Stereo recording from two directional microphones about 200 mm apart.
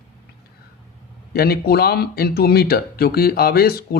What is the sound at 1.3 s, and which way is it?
Speech, 50° left (ahead or behind).